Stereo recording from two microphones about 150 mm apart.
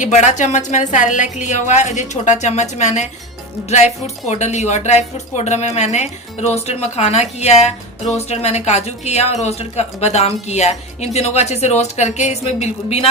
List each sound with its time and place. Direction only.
0.0 s speech: 50° left (ahead or behind)